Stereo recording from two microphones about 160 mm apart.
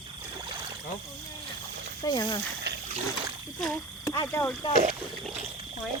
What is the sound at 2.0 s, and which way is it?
Speech, 25° left (ahead or behind).